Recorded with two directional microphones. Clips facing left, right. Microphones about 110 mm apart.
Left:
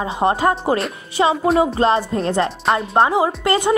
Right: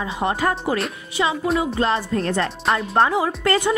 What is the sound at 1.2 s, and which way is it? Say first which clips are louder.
Speech: left 5 dB; 40° left (ahead or behind).